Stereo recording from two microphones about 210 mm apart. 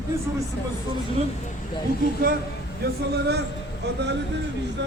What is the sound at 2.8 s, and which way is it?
Speech, 50° right (ahead or behind).